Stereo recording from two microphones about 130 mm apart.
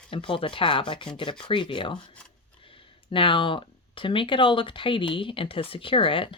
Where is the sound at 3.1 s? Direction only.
40° left (ahead or behind).